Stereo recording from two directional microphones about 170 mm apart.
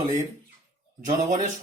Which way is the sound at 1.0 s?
45° right (ahead or behind).